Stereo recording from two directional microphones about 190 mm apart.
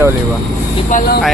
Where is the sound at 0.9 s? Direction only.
45° left (ahead or behind).